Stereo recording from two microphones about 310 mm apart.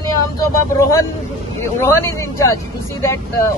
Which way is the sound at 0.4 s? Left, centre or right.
Centre.